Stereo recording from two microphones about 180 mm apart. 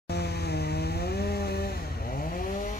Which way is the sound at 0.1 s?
65° left (ahead or behind).